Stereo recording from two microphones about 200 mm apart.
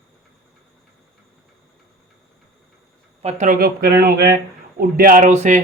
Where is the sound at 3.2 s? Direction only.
40° right (ahead or behind).